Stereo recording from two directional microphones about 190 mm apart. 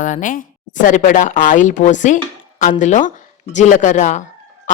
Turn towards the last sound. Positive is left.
turn(degrees=40)  # may be behind; listen again after turning